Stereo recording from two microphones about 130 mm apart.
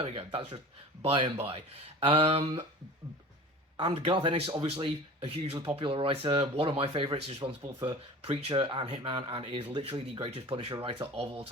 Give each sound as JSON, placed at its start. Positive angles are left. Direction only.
{"t": 0.0, "sound": "speech", "side_deg": -55}
{"t": 3.8, "sound": "speech", "side_deg": -45}